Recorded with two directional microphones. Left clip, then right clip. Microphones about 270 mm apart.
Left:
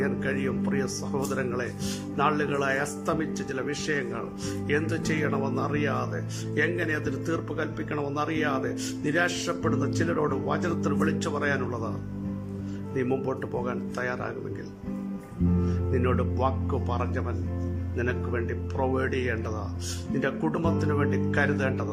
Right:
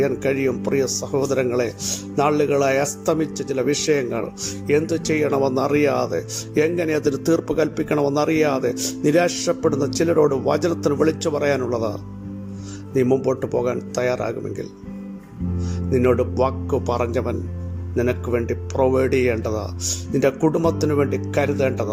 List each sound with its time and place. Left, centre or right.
0.0 s speech: centre
12.9 s speech: centre
15.9 s speech: centre